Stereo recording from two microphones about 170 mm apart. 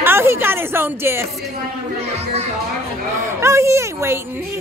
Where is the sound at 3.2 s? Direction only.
15° right (ahead or behind).